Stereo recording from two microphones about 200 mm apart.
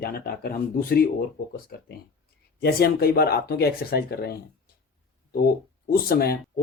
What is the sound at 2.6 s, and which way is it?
Speech, 50° left (ahead or behind).